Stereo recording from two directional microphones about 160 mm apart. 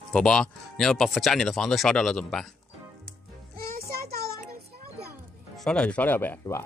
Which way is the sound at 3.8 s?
75° right (ahead or behind).